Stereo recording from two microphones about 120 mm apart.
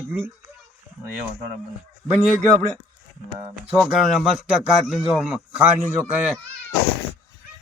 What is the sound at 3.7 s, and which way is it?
A man's voice, centre (ahead or behind).